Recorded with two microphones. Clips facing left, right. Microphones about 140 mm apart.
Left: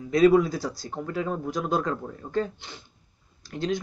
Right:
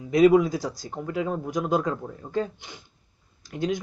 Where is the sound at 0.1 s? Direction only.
15° right (ahead or behind).